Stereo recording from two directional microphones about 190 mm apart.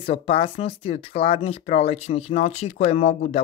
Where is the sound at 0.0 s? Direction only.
30° left (ahead or behind).